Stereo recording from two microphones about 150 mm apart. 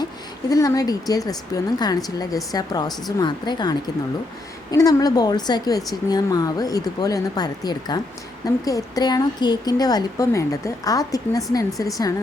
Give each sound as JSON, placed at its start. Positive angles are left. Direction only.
{"t": 0.5, "sound": "a woman's voice", "side_deg": 25}